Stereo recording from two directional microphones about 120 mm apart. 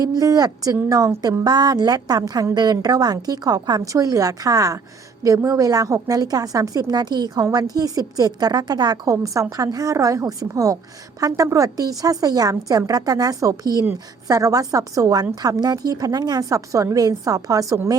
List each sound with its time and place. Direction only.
0.0 s a woman's voice: 30° right (ahead or behind)